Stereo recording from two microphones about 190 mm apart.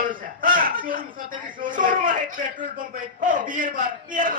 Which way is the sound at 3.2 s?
45° right (ahead or behind).